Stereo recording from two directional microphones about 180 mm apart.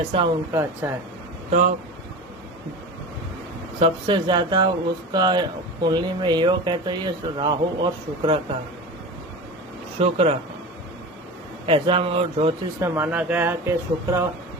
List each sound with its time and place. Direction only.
0.1 s speech: 30° right (ahead or behind)
0.5 s speech: 15° right (ahead or behind)
1.5 s speech: 40° right (ahead or behind)
3.8 s speech: 30° right (ahead or behind)
10.0 s speech: 35° right (ahead or behind)
11.6 s speech: 30° right (ahead or behind)
12.8 s speech: 15° right (ahead or behind)